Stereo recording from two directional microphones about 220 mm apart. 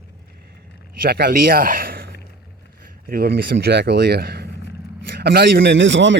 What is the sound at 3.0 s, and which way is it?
Speech, 45° right (ahead or behind).